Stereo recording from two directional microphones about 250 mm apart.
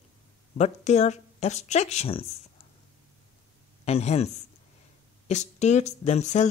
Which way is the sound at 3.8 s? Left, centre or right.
Left.